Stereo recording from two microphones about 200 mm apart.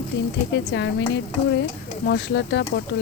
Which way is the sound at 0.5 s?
65° left (ahead or behind).